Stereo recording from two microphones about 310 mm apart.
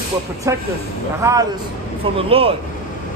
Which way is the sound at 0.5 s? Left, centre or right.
Centre.